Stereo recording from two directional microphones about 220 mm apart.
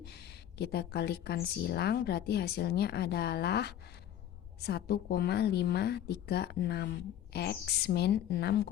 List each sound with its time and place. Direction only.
0.0 s a woman's voice: 50° left (ahead or behind)